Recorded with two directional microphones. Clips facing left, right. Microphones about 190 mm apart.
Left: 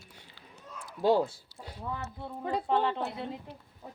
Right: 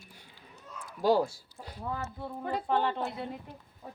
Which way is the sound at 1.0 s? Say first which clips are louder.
Even; 25° left (ahead or behind).